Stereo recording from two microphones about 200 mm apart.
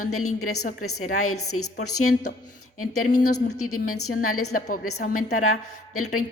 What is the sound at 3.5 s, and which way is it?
A woman's voice, 90° left.